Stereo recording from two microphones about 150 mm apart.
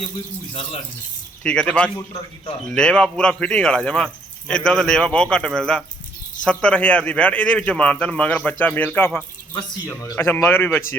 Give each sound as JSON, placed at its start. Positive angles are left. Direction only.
{"t": 1.5, "sound": "a man's voice", "side_deg": 5}